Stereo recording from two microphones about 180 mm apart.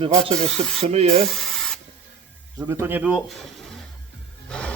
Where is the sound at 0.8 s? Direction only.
35° right (ahead or behind).